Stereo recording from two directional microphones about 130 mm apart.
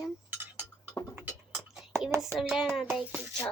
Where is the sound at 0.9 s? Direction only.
20° left (ahead or behind).